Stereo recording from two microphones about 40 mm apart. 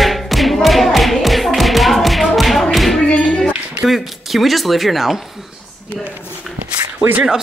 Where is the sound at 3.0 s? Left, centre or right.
Left.